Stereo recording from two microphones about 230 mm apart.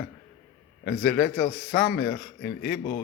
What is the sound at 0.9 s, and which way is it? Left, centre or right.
Speech, left.